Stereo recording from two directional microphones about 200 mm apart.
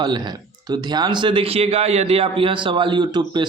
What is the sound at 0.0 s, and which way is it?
Speech, 20° right (ahead or behind).